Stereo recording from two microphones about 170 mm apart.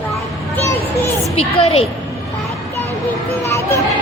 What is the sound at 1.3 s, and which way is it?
Speech, 35° left (ahead or behind).